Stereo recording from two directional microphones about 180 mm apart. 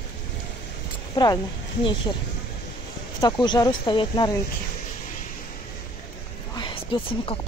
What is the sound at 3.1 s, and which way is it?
A woman's voice, 20° left (ahead or behind).